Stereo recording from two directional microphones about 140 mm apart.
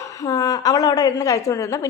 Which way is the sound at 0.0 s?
25° left (ahead or behind).